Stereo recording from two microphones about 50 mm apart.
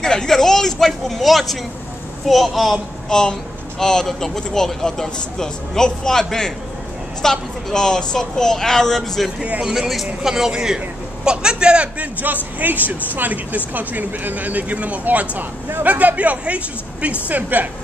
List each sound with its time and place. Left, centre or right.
0.0 s a woman's voice: centre
3.1 s a woman's voice: centre
9.4 s speech: right
9.8 s a woman's voice: centre; by 17.6 s right